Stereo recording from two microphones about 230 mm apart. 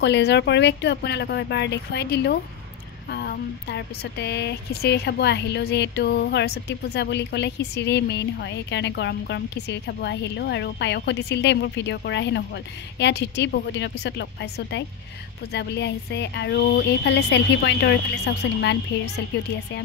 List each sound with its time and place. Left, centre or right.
0.0 s speech: left